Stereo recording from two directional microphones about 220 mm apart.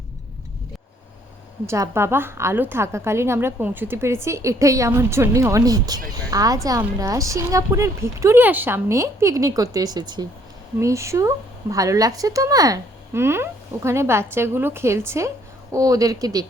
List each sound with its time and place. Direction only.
1.6 s speech: 15° right (ahead or behind)